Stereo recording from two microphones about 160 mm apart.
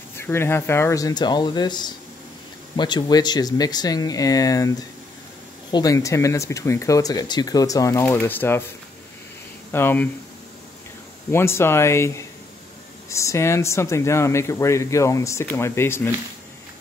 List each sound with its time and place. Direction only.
0.1 s speech: 15° left (ahead or behind)
9.7 s speech: 15° left (ahead or behind)
11.3 s speech: 15° left (ahead or behind)